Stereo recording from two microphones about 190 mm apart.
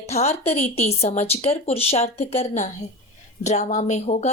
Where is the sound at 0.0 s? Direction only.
35° left (ahead or behind).